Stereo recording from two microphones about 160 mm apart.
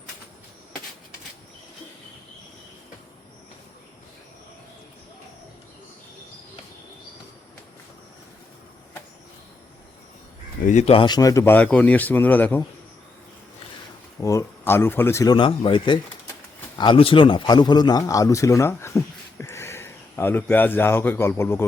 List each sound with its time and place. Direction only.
10.7 s speech: 40° left (ahead or behind); by 12.6 s 10° left (ahead or behind)
14.2 s a man's voice: 20° left (ahead or behind)